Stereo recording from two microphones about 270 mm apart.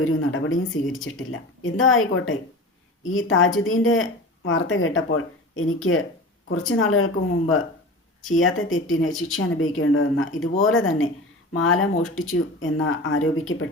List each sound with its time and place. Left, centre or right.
0.0 s speech: left
8.3 s speech: left